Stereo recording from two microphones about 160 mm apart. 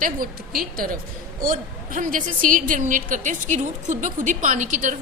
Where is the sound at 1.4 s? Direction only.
55° right (ahead or behind).